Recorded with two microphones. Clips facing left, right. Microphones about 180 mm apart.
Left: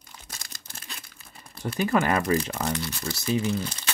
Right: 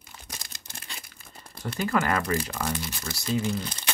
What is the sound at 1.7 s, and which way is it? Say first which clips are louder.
Speech: left 3 dB; 15° left (ahead or behind).